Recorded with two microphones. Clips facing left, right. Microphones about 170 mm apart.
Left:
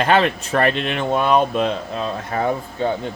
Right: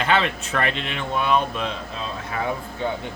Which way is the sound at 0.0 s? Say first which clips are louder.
Left 5 dB; 40° left (ahead or behind).